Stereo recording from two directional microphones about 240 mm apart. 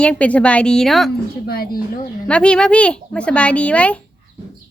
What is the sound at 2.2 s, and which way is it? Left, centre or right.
Speech, centre.